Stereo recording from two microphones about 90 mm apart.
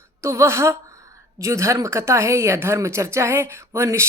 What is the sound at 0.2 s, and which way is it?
A woman's voice, 30° right (ahead or behind).